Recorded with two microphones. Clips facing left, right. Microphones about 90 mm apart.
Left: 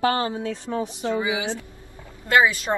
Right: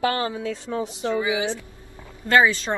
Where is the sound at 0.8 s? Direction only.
25° left (ahead or behind).